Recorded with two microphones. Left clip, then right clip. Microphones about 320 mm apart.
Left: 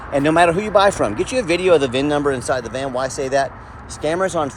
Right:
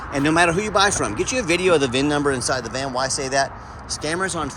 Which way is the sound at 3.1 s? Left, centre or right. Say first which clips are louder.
Left 2 dB; right.